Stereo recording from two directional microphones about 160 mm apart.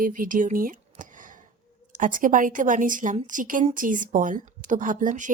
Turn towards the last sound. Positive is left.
turn(degrees=-55)  # may be behind; listen again after turning